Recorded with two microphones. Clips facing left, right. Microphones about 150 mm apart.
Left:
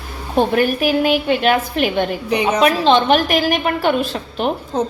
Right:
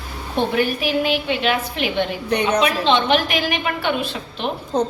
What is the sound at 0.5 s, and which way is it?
A woman's voice, 50° left (ahead or behind).